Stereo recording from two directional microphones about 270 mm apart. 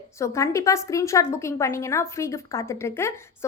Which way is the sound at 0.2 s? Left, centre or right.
Centre.